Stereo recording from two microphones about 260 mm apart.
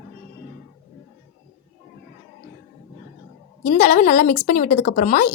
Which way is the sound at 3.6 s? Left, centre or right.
Left.